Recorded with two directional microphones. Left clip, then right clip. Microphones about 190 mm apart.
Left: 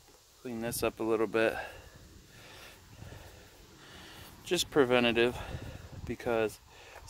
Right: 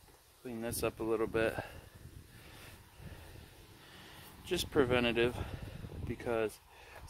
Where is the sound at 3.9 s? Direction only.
50° left (ahead or behind).